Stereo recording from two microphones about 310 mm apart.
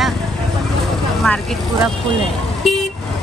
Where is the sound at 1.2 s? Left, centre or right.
Centre.